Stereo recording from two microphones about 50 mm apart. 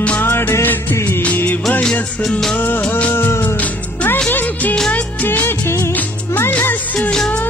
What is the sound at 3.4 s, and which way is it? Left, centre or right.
Music, left.